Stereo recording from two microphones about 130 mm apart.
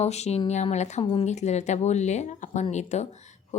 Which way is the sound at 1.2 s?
60° left (ahead or behind).